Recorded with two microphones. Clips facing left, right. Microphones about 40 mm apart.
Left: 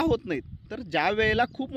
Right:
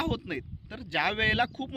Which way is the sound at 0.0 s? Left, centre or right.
Right.